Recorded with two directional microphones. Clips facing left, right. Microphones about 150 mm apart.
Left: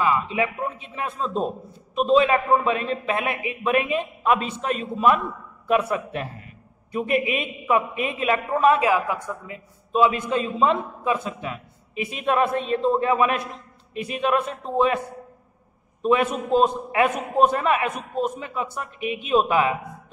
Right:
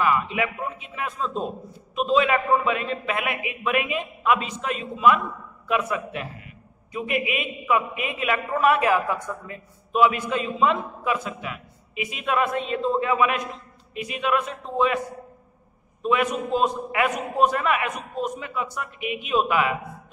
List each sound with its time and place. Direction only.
0.0 s a man's voice: 25° left (ahead or behind)
8.6 s a woman's voice: 15° left (ahead or behind); by 15.0 s 35° left (ahead or behind)
16.5 s a man's voice: 35° left (ahead or behind)